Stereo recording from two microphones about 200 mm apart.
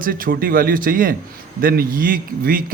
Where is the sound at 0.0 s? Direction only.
45° right (ahead or behind).